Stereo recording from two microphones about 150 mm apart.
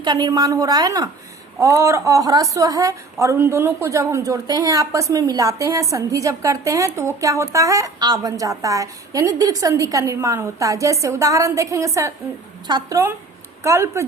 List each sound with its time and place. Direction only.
0.0 s a woman's voice: 25° right (ahead or behind)